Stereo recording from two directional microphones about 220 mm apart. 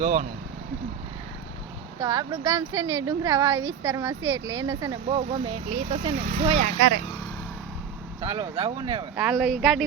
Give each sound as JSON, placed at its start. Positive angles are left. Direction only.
{"t": 0.0, "sound": "speech", "side_deg": -35}
{"t": 2.0, "sound": "speech", "side_deg": -15}
{"t": 6.4, "sound": "speech", "side_deg": -20}
{"t": 8.2, "sound": "speech", "side_deg": -25}
{"t": 9.1, "sound": "speech", "side_deg": 0}